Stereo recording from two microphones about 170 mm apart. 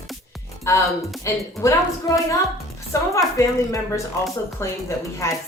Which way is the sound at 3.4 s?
15° left (ahead or behind).